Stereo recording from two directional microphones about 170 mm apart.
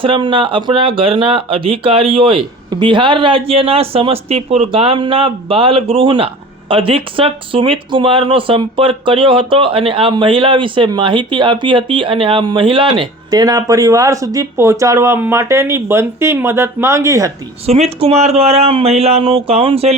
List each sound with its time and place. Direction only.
0.0 s speech: 30° right (ahead or behind)
17.7 s speech: 40° right (ahead or behind)